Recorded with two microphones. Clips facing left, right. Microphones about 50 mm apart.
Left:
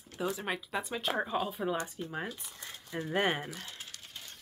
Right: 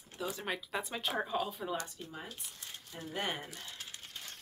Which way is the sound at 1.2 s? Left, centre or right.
Centre.